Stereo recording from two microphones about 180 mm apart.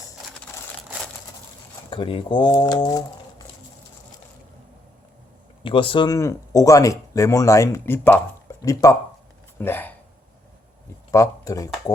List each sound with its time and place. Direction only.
1.9 s speech: 30° left (ahead or behind)
5.6 s speech: 30° left (ahead or behind); by 9.9 s 10° left (ahead or behind)
11.1 s speech: 20° left (ahead or behind)